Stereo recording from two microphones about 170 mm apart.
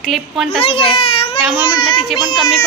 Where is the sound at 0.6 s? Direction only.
35° left (ahead or behind).